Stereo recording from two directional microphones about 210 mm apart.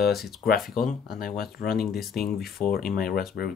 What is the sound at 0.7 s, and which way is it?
Speech, 40° left (ahead or behind).